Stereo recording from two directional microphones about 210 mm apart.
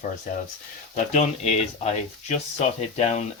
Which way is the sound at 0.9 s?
35° left (ahead or behind).